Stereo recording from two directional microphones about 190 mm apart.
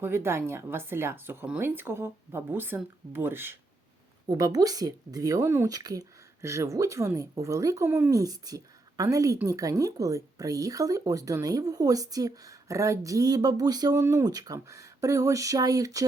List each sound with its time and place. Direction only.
0.0 s speech: 10° right (ahead or behind)